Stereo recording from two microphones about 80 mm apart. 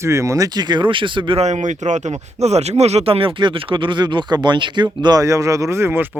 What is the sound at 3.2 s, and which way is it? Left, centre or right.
Speech, right.